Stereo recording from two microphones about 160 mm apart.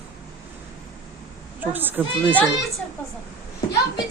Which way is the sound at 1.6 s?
10° right (ahead or behind).